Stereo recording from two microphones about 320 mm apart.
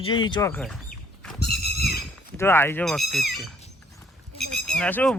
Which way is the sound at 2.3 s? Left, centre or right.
Centre.